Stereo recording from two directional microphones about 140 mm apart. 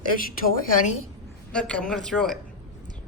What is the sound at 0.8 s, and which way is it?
Speech, 55° left (ahead or behind).